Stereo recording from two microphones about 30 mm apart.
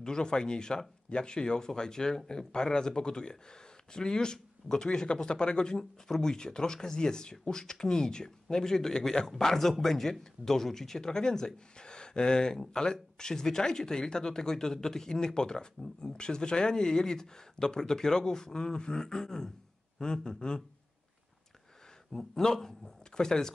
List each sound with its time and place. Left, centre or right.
0.0 s speech: left
22.4 s speech: centre